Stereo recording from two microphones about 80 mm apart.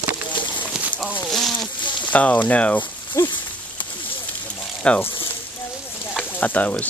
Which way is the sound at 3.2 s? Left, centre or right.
Left.